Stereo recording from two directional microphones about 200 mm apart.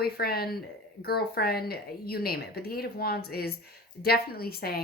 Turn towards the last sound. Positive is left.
turn(degrees=50)  # may be behind; listen again after turning